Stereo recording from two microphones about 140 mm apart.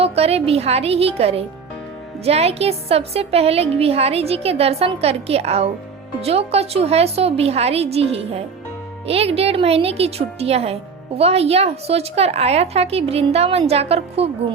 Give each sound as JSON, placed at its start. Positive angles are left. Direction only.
{"t": 0.0, "sound": "a woman's voice", "side_deg": -45}